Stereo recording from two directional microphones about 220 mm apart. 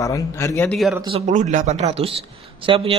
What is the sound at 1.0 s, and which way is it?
Speech, 25° right (ahead or behind).